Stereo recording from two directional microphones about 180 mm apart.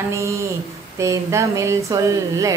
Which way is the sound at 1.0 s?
15° right (ahead or behind).